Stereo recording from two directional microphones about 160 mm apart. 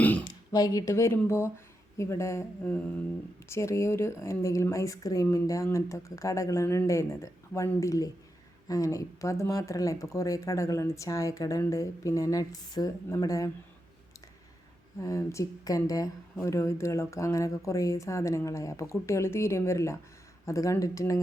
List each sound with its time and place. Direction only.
0.5 s speech: 25° left (ahead or behind)
14.9 s speech: 20° left (ahead or behind)